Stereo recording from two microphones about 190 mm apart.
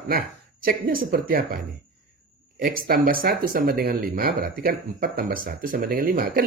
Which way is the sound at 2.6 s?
50° right (ahead or behind).